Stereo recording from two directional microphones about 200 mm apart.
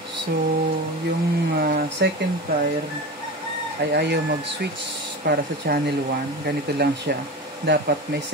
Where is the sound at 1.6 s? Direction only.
55° right (ahead or behind).